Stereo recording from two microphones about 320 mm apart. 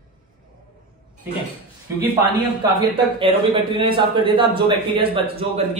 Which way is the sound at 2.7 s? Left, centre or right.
Centre.